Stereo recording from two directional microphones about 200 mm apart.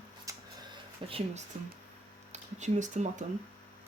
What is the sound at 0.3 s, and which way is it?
Music, 15° right (ahead or behind).